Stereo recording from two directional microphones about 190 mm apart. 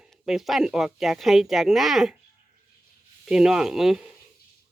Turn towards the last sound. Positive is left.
turn(degrees=0)  # may be behind; listen again after turning